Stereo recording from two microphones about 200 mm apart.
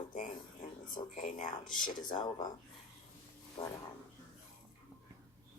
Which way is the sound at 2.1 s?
20° left (ahead or behind).